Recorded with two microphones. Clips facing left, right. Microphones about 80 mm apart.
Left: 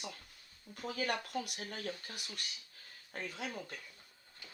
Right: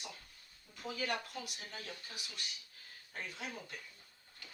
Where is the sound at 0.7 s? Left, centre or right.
Left.